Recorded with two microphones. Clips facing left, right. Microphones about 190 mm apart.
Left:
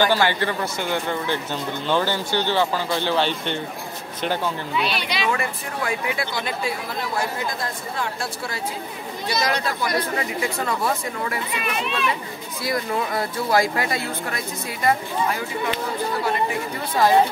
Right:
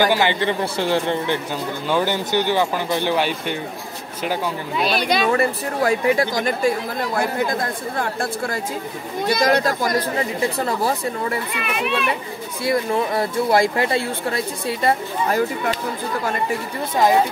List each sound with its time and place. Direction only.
0.0 s speech: 15° right (ahead or behind)
4.7 s speech: 45° right (ahead or behind)
7.2 s speech: 55° right (ahead or behind); by 11.3 s 35° right (ahead or behind)
11.5 s speech: 60° right (ahead or behind)
12.6 s speech: 25° right (ahead or behind)
15.2 s speech: 45° right (ahead or behind)